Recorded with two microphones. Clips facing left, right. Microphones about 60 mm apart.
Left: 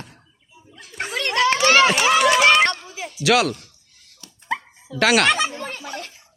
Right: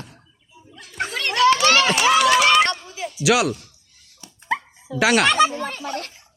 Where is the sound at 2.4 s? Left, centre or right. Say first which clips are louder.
Left 1 dB; left.